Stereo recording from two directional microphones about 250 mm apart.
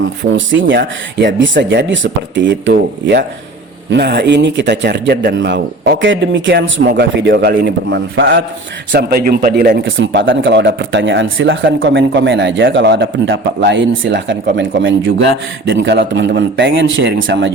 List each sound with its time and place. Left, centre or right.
0.2 s speech: right
9.8 s speech: right